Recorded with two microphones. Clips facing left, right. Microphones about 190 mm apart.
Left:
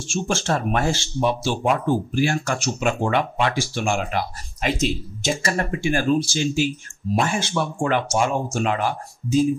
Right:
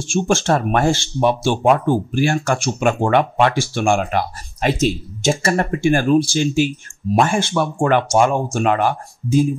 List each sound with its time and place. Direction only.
0.1 s speech: 55° right (ahead or behind)